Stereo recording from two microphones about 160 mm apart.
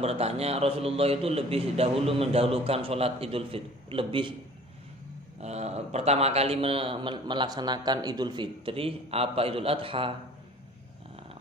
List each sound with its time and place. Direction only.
0.0 s a man's voice: 40° right (ahead or behind)
5.4 s a man's voice: 45° right (ahead or behind)